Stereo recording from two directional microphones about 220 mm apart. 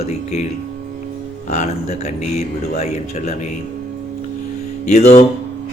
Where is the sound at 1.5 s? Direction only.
30° left (ahead or behind).